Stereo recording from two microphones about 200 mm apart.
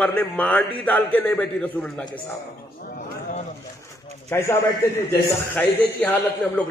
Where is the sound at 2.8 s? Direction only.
40° left (ahead or behind).